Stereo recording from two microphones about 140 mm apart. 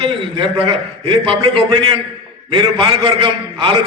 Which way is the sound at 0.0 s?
40° right (ahead or behind).